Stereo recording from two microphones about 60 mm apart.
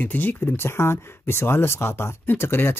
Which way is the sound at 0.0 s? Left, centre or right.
Left.